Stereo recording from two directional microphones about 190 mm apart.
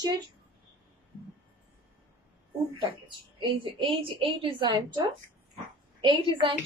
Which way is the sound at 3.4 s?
25° right (ahead or behind).